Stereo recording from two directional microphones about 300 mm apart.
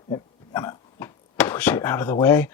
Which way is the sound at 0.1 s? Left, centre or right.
Centre.